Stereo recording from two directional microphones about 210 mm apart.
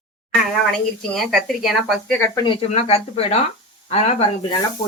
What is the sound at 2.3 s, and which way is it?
Speech, 25° left (ahead or behind).